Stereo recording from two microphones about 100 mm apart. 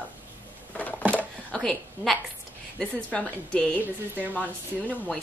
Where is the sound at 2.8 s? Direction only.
10° left (ahead or behind).